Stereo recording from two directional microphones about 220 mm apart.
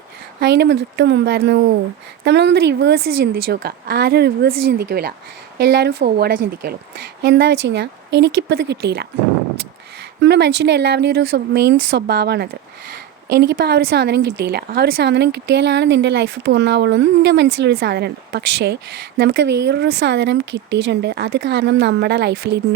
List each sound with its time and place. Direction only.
0.3 s speech: 50° right (ahead or behind)
10.2 s speech: 50° right (ahead or behind)